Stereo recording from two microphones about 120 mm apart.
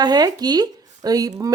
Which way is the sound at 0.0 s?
35° right (ahead or behind).